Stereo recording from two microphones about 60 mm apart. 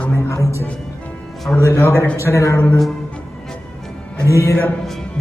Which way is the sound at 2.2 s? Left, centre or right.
Left.